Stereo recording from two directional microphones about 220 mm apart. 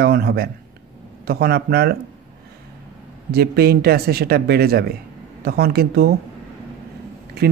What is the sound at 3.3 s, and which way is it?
Speech, 45° right (ahead or behind).